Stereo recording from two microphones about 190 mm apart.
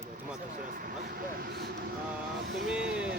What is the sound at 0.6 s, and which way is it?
Speech, 45° right (ahead or behind).